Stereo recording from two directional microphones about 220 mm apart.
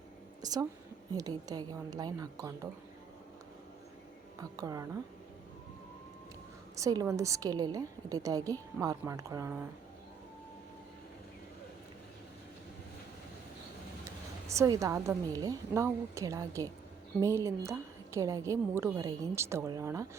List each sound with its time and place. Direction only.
0.4 s a woman's voice: 15° right (ahead or behind)
4.4 s a woman's voice: 15° right (ahead or behind)
6.7 s a woman's voice: 15° right (ahead or behind)
14.0 s a woman's voice: 15° right (ahead or behind)